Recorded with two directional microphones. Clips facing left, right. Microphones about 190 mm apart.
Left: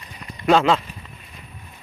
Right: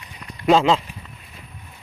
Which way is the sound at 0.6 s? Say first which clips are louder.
Even; 25° right (ahead or behind).